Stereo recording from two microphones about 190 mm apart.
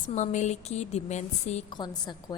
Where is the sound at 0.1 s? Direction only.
40° left (ahead or behind).